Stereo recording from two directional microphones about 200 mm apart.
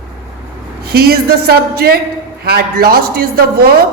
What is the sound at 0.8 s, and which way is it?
A woman's voice, 50° right (ahead or behind).